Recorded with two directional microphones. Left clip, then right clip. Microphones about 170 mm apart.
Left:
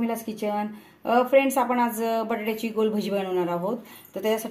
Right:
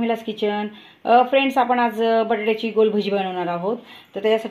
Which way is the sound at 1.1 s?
25° right (ahead or behind).